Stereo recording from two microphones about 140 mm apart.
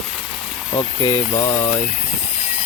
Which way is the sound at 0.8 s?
30° left (ahead or behind).